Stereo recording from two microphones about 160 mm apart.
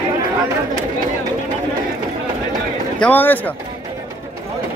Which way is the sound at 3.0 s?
10° left (ahead or behind).